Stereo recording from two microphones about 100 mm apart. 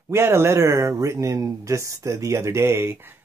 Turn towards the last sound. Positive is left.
turn(degrees=-25)  # may be behind; listen again after turning